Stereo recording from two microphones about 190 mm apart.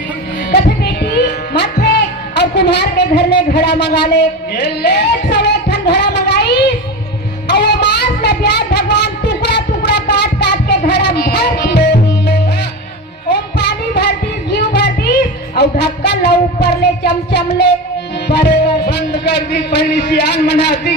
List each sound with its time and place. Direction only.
1.0 s music: 60° left (ahead or behind)
2.3 s a sound: 65° left (ahead or behind)
11.6 s music: 60° left (ahead or behind)
13.2 s child singing: 65° left (ahead or behind)
15.5 s a sound: 60° left (ahead or behind)
18.3 s a man's voice: 60° left (ahead or behind)